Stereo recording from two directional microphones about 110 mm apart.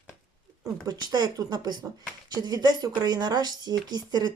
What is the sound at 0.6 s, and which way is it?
Speech, 35° right (ahead or behind).